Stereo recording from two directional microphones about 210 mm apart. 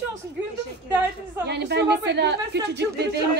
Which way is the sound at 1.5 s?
55° right (ahead or behind).